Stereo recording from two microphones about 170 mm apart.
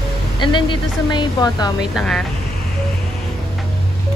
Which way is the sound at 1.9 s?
Centre (ahead or behind).